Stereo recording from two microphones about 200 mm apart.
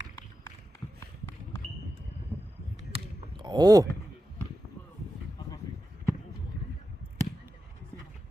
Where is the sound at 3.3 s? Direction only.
20° right (ahead or behind).